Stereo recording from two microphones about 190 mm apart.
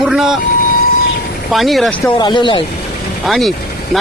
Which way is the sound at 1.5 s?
Centre (ahead or behind).